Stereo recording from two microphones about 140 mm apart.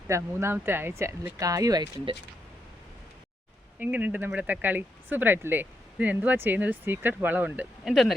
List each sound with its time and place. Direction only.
0.1 s speech: 20° right (ahead or behind)
3.8 s speech: 10° right (ahead or behind)